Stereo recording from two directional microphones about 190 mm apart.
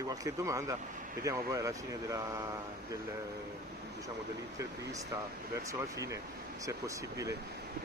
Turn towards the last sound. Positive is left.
turn(degrees=-15)  # may be behind; listen again after turning